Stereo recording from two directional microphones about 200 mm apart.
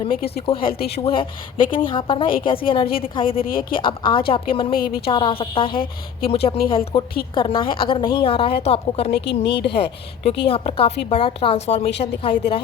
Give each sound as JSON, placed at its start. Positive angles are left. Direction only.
{"t": 0.3, "sound": "a woman's voice", "side_deg": 25}
{"t": 0.7, "sound": "speech", "side_deg": 50}
{"t": 1.0, "sound": "a woman's voice", "side_deg": 25}
{"t": 9.1, "sound": "a woman's voice", "side_deg": 60}
{"t": 9.7, "sound": "a woman's voice", "side_deg": 25}